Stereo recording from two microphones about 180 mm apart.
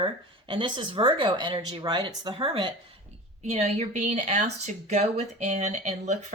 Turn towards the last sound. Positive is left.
turn(degrees=-40)  # may be behind; listen again after turning